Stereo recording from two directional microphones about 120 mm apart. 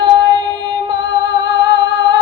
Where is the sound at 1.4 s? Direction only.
35° right (ahead or behind).